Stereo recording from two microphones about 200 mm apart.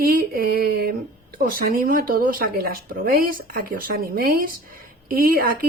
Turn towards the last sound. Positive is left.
turn(degrees=-45)  # may be behind; listen again after turning